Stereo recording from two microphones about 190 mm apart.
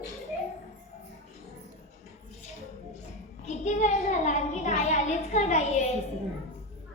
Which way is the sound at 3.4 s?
40° left (ahead or behind).